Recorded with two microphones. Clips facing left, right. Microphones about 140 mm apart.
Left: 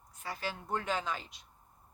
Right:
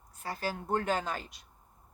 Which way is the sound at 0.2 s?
40° right (ahead or behind).